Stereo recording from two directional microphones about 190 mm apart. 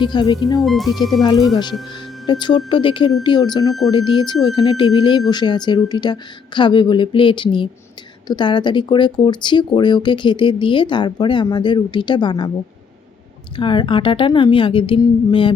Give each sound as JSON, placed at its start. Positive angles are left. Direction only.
{"t": 0.0, "sound": "speech", "side_deg": 25}
{"t": 0.6, "sound": "speech", "side_deg": 0}
{"t": 1.2, "sound": "speech", "side_deg": 20}
{"t": 13.6, "sound": "speech", "side_deg": 25}